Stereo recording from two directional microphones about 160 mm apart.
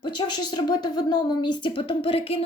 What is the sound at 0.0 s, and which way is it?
A woman's voice, 30° left (ahead or behind).